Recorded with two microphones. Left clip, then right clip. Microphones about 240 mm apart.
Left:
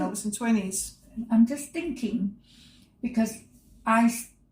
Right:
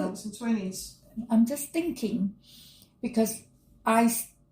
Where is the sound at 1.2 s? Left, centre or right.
Right.